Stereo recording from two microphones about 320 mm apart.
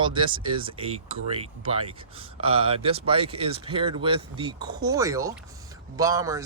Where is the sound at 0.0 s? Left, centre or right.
Centre.